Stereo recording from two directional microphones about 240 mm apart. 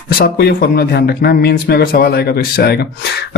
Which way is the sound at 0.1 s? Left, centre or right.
Left.